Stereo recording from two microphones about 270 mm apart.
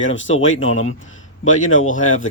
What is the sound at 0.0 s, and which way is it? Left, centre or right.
A man's voice, left.